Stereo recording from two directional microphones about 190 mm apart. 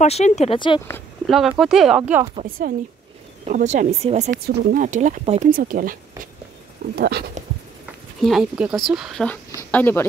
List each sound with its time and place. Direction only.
0.0 s speech: 35° left (ahead or behind)
0.6 s speech: 25° left (ahead or behind)
1.2 s speech: centre (ahead or behind)
3.4 s speech: 40° right (ahead or behind)
4.3 s speech: 60° right (ahead or behind)
4.8 s speech: 40° right (ahead or behind)
5.5 s speech: 45° right (ahead or behind)
7.0 s speech: 55° right (ahead or behind)
8.2 s speech: centre (ahead or behind)